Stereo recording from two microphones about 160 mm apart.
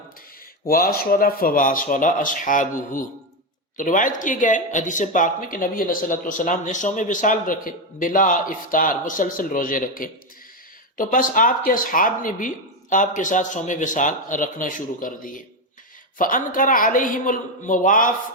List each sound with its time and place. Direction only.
0.7 s speech: 70° left (ahead or behind)